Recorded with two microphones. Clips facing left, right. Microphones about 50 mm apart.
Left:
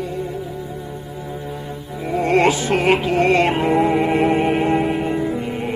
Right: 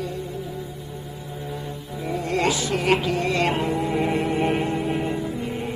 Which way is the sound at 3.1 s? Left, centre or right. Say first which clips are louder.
Left 8 dB; left.